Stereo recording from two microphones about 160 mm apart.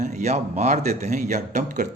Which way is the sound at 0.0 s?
45° right (ahead or behind).